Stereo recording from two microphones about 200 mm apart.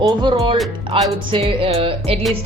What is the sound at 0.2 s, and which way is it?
Speech, 25° right (ahead or behind).